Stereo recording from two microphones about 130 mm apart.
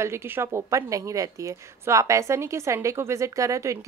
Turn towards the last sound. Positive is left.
turn(degrees=-25)  # may be behind; listen again after turning